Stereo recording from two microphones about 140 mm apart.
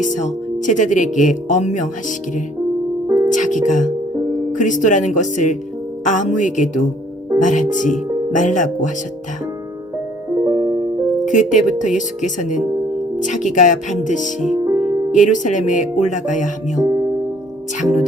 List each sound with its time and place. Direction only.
0.0 s speech: 65° left (ahead or behind)
3.2 s music: 65° left (ahead or behind)
4.5 s speech: 65° left (ahead or behind)
10.3 s music: 30° right (ahead or behind)
11.3 s speech: 60° left (ahead or behind)
14.6 s music: 20° right (ahead or behind)
15.1 s speech: 65° left (ahead or behind)
16.8 s music: 25° right (ahead or behind)